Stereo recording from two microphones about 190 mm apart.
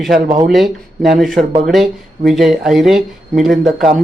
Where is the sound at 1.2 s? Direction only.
Centre (ahead or behind).